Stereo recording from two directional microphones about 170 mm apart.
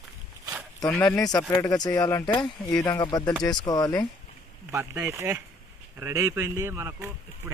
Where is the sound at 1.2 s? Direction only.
20° left (ahead or behind).